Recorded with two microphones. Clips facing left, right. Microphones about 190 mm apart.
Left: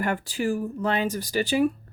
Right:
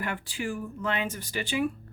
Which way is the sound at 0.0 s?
40° left (ahead or behind).